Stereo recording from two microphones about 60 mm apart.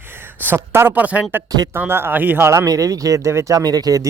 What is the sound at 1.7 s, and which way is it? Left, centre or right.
Speech, right.